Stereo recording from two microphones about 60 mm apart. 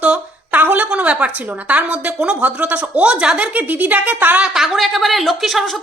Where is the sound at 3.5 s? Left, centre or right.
Right.